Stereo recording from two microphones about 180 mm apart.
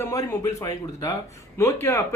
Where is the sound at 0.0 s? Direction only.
20° left (ahead or behind).